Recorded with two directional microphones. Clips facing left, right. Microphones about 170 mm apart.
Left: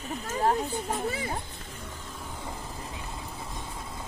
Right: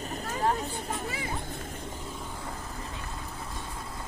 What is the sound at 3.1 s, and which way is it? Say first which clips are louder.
Vehicle: even; 5° left (ahead or behind).